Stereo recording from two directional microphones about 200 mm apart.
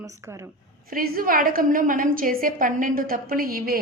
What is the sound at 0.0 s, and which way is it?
Speech, 15° right (ahead or behind).